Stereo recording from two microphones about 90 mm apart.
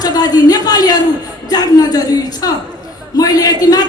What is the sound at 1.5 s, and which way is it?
A man's voice, 45° left (ahead or behind).